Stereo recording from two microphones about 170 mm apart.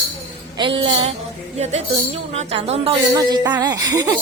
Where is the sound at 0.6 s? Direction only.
30° right (ahead or behind).